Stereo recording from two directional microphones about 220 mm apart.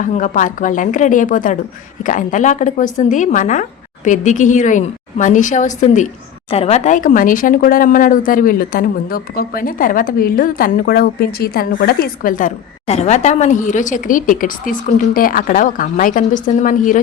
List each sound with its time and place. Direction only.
0.0 s speech: 35° left (ahead or behind)